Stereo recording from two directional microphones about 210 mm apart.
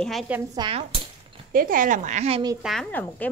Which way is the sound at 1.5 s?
40° right (ahead or behind).